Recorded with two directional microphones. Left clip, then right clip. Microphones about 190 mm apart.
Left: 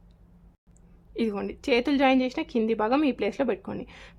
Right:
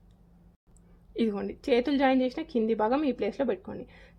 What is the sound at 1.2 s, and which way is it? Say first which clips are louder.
A woman's voice: left 1 dB; 5° left (ahead or behind).